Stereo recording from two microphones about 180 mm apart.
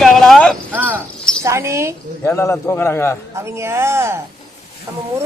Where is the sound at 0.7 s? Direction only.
10° right (ahead or behind).